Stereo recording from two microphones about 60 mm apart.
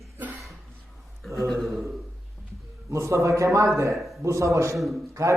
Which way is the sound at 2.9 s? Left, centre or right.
Right.